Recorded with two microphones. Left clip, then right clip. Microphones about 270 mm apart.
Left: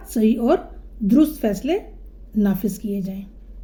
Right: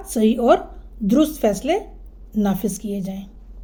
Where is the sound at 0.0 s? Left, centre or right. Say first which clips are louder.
Right 2 dB; centre.